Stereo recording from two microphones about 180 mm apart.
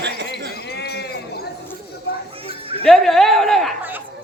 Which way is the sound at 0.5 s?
65° left (ahead or behind).